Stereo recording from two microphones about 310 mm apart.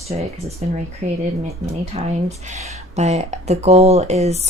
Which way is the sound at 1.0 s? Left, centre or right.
Right.